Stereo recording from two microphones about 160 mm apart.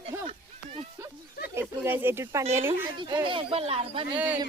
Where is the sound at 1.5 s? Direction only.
15° right (ahead or behind).